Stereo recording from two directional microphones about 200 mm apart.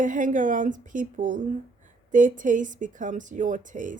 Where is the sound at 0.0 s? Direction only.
40° right (ahead or behind).